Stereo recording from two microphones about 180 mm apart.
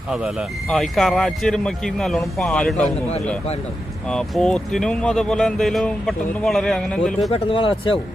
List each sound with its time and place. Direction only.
0.1 s speech: centre (ahead or behind)
4.1 s speech: 5° left (ahead or behind)
7.3 s speech: 30° left (ahead or behind)